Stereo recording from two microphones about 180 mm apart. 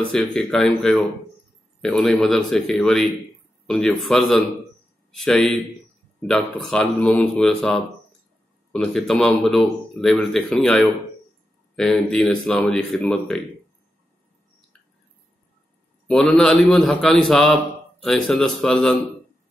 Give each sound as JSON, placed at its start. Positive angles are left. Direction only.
{"t": 0.1, "sound": "speech", "side_deg": 5}
{"t": 16.1, "sound": "speech", "side_deg": 0}